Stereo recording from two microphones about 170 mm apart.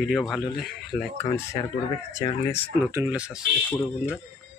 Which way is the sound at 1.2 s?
15° left (ahead or behind).